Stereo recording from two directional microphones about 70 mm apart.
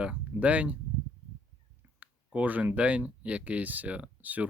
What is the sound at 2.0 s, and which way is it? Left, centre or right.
Speech, right.